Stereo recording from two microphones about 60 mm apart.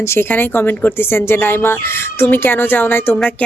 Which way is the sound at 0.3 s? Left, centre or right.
Left.